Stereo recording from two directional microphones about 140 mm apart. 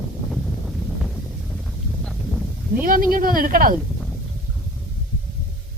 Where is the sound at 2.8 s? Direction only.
90° right.